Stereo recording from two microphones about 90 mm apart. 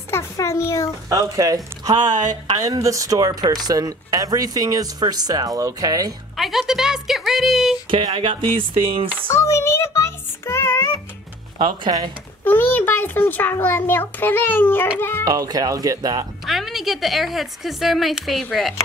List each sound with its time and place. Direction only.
0.1 s a child's voice: 35° left (ahead or behind)
1.0 s speech: 40° right (ahead or behind)
6.3 s a woman's voice: centre (ahead or behind)
7.9 s speech: 70° right (ahead or behind)
9.3 s music: 35° left (ahead or behind)
11.5 s speech: 65° right (ahead or behind)
12.4 s a child's voice: 20° left (ahead or behind)
15.2 s speech: 45° right (ahead or behind)
16.4 s a woman's voice: centre (ahead or behind)